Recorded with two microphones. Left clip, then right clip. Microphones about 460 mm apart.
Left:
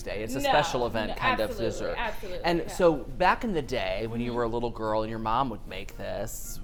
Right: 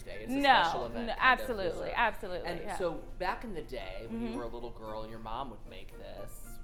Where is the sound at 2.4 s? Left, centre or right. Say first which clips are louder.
Left 16 dB; left.